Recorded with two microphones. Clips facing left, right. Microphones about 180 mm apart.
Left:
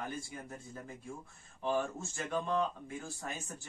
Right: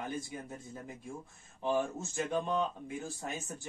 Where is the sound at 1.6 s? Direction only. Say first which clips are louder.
Right 2 dB; 15° right (ahead or behind).